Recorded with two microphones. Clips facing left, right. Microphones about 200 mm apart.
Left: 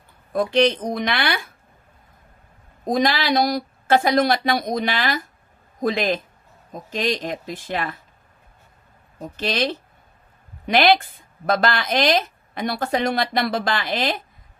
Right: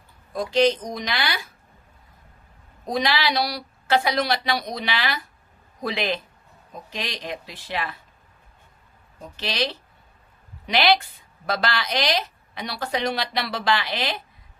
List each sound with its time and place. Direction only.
0.3 s speech: 60° left (ahead or behind)
2.8 s a woman's voice: 45° left (ahead or behind)
9.2 s a woman's voice: 50° left (ahead or behind)